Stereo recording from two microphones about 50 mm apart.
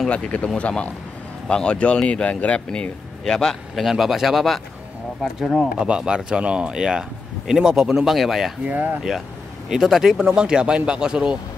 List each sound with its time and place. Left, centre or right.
0.1 s speech: left
2.7 s a man's voice: centre
3.7 s speech: centre
5.8 s speech: centre
8.7 s speech: right
9.7 s speech: centre